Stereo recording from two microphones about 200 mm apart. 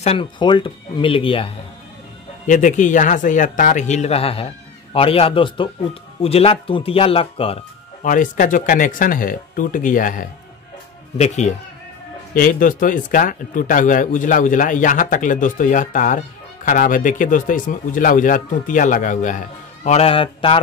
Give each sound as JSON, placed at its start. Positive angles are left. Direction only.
{"t": 0.0, "sound": "speech", "side_deg": 25}
{"t": 2.4, "sound": "speech", "side_deg": 40}
{"t": 8.0, "sound": "speech", "side_deg": 40}